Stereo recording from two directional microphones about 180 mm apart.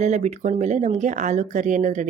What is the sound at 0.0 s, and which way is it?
Speech, 40° right (ahead or behind).